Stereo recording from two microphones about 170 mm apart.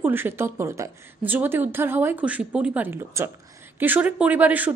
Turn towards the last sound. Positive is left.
turn(degrees=-10)  # may be behind; listen again after turning